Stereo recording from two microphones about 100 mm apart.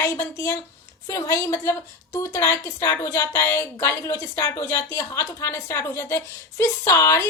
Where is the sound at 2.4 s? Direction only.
25° left (ahead or behind).